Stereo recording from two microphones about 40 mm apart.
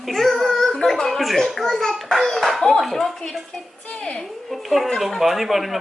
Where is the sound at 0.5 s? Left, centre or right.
Centre.